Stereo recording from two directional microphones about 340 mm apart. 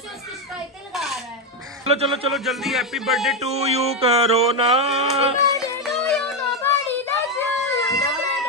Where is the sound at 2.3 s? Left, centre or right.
Centre.